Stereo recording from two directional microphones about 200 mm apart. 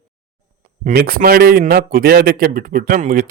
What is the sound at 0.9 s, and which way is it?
A man's voice, 45° right (ahead or behind).